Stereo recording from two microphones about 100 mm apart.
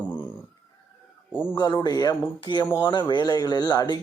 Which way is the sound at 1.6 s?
45° left (ahead or behind).